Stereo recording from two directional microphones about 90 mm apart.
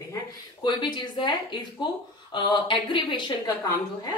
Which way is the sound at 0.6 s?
55° left (ahead or behind).